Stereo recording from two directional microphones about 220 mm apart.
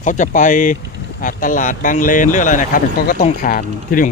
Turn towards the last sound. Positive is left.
turn(degrees=40)  # may be behind; listen again after turning